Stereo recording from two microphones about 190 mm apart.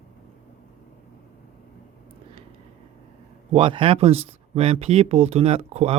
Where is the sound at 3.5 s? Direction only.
25° right (ahead or behind).